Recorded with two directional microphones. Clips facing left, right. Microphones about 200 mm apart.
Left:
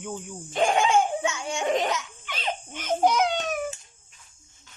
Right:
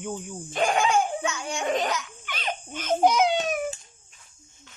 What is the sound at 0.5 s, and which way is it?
Speech, 25° left (ahead or behind).